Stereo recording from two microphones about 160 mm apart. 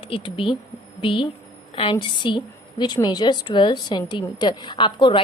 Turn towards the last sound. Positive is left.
turn(degrees=30)  # may be behind; listen again after turning